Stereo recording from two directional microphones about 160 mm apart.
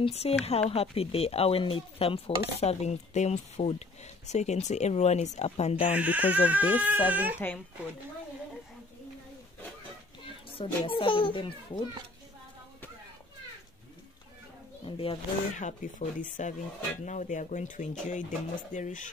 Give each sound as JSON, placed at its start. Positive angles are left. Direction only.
{"t": 0.0, "sound": "speech", "side_deg": 40}
{"t": 5.9, "sound": "speech", "side_deg": -10}
{"t": 7.3, "sound": "speech", "side_deg": 10}
{"t": 10.6, "sound": "speech", "side_deg": 35}
{"t": 14.9, "sound": "speech", "side_deg": 35}
{"t": 15.5, "sound": "speech", "side_deg": 50}